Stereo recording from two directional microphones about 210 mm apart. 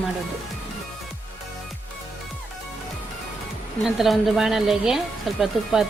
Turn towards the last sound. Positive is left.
turn(degrees=0)  # may be behind; listen again after turning